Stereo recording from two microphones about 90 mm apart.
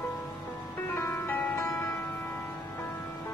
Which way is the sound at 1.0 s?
25° left (ahead or behind).